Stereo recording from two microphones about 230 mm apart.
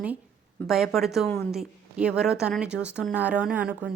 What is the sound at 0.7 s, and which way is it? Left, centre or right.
A woman's voice, centre.